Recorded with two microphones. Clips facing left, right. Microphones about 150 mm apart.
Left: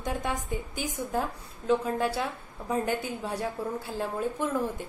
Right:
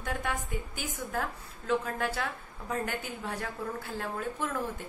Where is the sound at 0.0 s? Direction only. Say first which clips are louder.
Left 3 dB; 20° left (ahead or behind).